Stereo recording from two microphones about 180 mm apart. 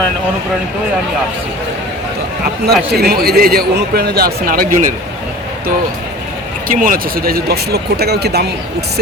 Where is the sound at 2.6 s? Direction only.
60° right (ahead or behind).